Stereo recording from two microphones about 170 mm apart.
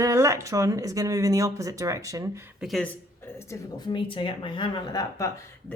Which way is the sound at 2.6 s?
Centre (ahead or behind).